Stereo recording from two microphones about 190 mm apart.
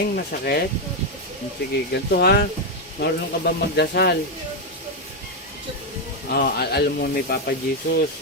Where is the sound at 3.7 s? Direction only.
55° left (ahead or behind).